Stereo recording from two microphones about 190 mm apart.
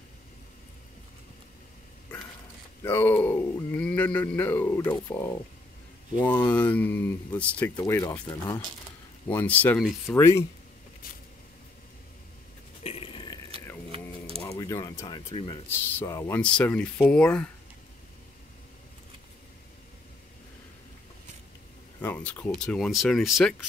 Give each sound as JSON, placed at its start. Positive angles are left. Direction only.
{"t": 2.8, "sound": "speech", "side_deg": 10}
{"t": 12.8, "sound": "burping", "side_deg": 30}
{"t": 13.9, "sound": "a sound", "side_deg": -30}
{"t": 14.5, "sound": "speech", "side_deg": 20}
{"t": 16.0, "sound": "speech", "side_deg": 15}
{"t": 22.0, "sound": "speech", "side_deg": 10}